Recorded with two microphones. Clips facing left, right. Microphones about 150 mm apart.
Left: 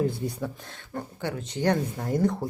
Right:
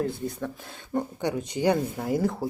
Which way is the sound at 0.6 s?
15° right (ahead or behind).